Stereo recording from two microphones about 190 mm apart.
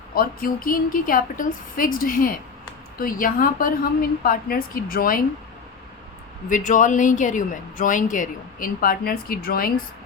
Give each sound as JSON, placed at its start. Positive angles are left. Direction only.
{"t": 0.1, "sound": "speech", "side_deg": 50}
{"t": 6.5, "sound": "speech", "side_deg": 45}